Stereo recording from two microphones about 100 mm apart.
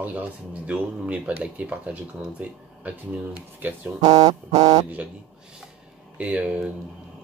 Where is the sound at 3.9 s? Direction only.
90° right.